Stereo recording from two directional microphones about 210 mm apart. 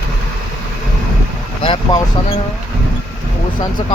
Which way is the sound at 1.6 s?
25° left (ahead or behind).